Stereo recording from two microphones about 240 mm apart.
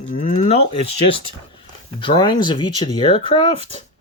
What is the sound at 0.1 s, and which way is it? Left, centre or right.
Livestock, left.